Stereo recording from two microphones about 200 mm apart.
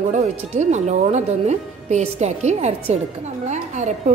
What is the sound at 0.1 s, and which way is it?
A woman's voice, 35° right (ahead or behind).